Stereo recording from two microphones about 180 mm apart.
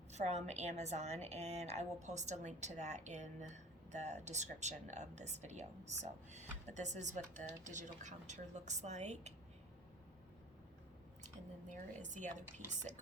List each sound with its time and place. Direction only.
0.1 s a woman's voice: 40° right (ahead or behind)
11.7 s speech: 45° right (ahead or behind)